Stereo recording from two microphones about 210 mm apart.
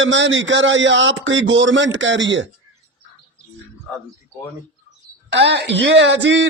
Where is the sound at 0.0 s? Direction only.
65° right (ahead or behind).